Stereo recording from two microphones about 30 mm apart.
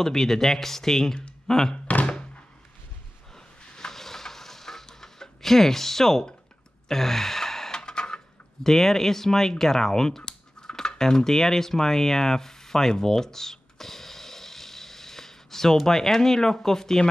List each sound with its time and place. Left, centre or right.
0.0 s speech: centre
1.9 s thunk: left
3.7 s a sound: centre
6.9 s sigh: centre
8.6 s speech: centre
10.8 s a sound: centre
15.8 s speech: centre